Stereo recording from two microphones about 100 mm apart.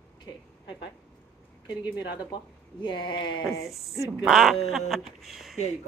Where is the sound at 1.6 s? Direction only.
45° left (ahead or behind).